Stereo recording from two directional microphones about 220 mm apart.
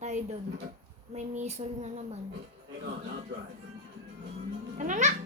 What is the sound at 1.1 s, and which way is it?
Child singing, 30° right (ahead or behind).